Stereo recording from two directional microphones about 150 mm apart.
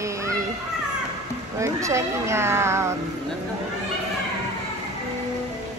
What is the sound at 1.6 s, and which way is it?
Speech, 20° right (ahead or behind).